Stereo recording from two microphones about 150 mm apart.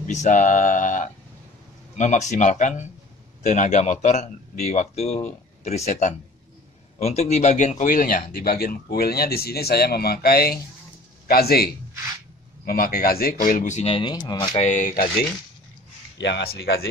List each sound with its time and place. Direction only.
0.0 s a sound: 55° left (ahead or behind)
2.0 s a man's voice: 55° left (ahead or behind); by 14.6 s 30° left (ahead or behind)
14.6 s speech: 55° left (ahead or behind)